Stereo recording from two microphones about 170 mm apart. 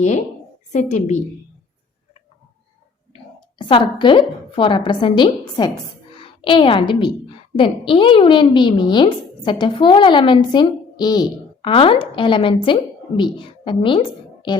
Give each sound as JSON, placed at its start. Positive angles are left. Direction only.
{"t": 0.7, "sound": "a woman's voice", "side_deg": 45}
{"t": 3.6, "sound": "a woman's voice", "side_deg": 30}